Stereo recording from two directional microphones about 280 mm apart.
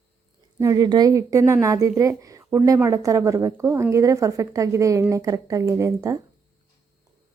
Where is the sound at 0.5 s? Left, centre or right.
Centre.